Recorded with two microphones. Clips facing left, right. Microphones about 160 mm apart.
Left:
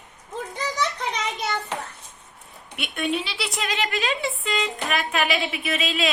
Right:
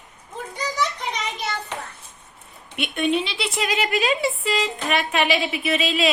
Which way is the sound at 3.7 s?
10° right (ahead or behind).